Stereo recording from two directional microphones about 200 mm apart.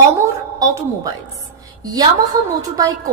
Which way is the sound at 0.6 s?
15° right (ahead or behind).